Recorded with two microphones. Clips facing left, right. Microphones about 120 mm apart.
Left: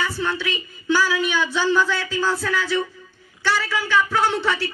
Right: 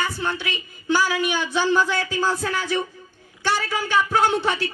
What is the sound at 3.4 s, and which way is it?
Speech, 50° right (ahead or behind).